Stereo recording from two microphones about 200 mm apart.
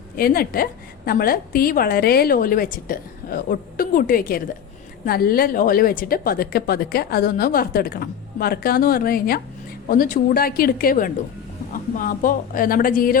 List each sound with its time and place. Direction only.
0.2 s a woman's voice: 50° left (ahead or behind)